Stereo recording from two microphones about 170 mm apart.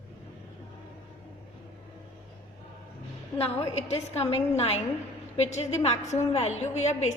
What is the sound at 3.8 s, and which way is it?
A woman's voice, 40° left (ahead or behind).